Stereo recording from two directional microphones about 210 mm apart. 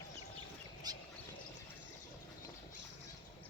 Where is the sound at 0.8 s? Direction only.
20° right (ahead or behind).